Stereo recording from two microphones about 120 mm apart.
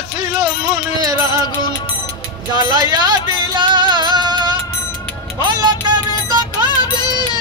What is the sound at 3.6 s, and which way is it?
Music, 40° right (ahead or behind).